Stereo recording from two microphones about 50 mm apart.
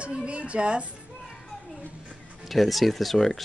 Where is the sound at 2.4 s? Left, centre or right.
Centre.